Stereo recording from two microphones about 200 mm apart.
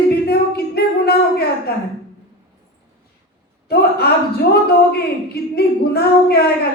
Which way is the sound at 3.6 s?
50° left (ahead or behind).